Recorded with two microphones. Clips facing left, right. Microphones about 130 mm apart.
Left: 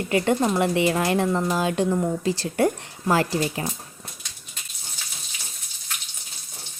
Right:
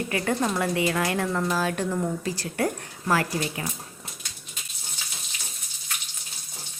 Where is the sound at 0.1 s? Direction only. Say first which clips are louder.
Left 7 dB; 25° left (ahead or behind).